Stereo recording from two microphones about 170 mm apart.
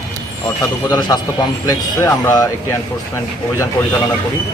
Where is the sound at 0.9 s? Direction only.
20° left (ahead or behind).